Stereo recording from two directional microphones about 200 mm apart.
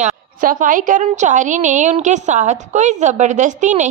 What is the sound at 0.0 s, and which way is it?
A woman's voice, 40° right (ahead or behind).